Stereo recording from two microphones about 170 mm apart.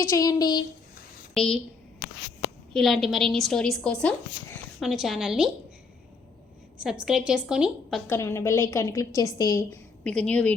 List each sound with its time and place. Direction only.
0.0 s speech: 20° left (ahead or behind)
1.3 s a woman's voice: 5° left (ahead or behind)
2.7 s a woman's voice: centre (ahead or behind)
7.0 s a woman's voice: 5° right (ahead or behind)
8.0 s a woman's voice: 15° left (ahead or behind)
10.0 s a woman's voice: 5° left (ahead or behind)